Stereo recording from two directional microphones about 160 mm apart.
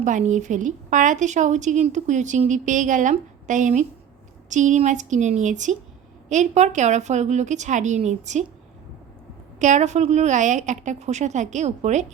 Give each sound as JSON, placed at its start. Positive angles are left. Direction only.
{"t": 0.0, "sound": "a woman's voice", "side_deg": -50}
{"t": 9.6, "sound": "a woman's voice", "side_deg": -50}